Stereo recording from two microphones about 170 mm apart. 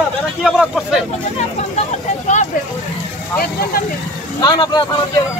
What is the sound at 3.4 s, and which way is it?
Speech, 60° left (ahead or behind).